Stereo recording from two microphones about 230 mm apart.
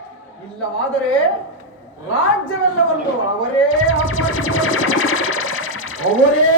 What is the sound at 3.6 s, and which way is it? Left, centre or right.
Music, left.